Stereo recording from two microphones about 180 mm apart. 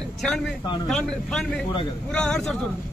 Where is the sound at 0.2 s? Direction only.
5° left (ahead or behind).